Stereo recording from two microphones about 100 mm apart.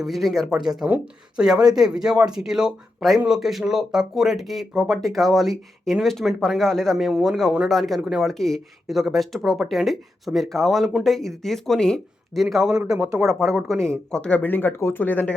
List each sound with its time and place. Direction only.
0.0 s speech: centre (ahead or behind)
13.1 s speech: 30° right (ahead or behind)
13.6 s speech: centre (ahead or behind)